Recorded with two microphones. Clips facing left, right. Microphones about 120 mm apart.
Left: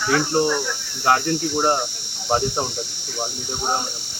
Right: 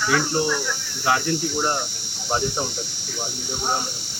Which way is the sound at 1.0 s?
55° left (ahead or behind).